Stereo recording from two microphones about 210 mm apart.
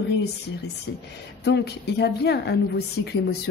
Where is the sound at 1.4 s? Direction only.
55° left (ahead or behind).